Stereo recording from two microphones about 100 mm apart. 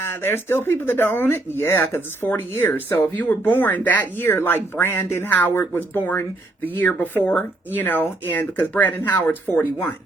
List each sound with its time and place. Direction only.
0.0 s speech: 25° left (ahead or behind)